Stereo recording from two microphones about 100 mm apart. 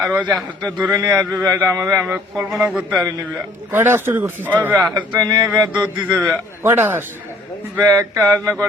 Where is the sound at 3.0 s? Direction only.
40° right (ahead or behind).